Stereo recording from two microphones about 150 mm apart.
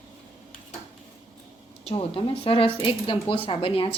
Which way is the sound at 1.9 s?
35° left (ahead or behind).